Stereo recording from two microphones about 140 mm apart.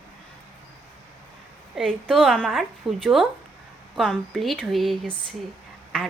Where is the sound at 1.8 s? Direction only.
Centre (ahead or behind).